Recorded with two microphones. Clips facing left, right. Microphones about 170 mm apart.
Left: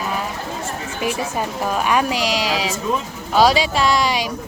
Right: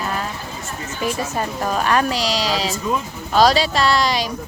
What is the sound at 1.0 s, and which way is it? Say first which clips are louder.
A woman's voice: even; 10° left (ahead or behind).